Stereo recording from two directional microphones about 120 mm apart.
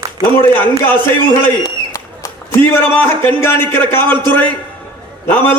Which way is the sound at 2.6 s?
15° left (ahead or behind).